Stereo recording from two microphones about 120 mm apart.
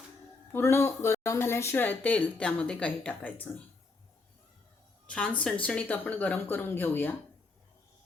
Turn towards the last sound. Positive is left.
turn(degrees=20)  # may be behind; listen again after turning